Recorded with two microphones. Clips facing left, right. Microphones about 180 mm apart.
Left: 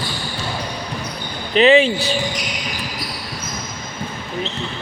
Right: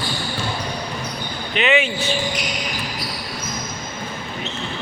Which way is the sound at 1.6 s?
35° left (ahead or behind).